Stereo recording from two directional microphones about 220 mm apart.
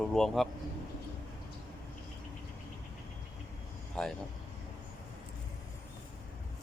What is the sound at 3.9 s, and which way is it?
Speech, 5° left (ahead or behind).